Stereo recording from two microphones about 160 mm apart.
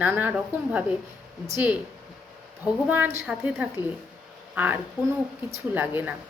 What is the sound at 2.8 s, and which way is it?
A woman's voice, 10° right (ahead or behind).